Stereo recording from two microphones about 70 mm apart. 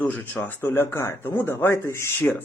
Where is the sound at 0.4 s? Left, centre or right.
Left.